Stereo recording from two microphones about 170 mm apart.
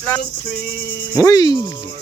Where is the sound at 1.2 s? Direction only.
20° left (ahead or behind).